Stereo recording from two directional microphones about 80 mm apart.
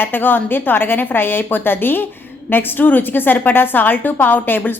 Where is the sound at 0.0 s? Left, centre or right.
Left.